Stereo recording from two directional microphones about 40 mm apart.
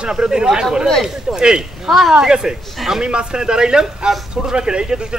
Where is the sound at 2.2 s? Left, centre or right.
Centre.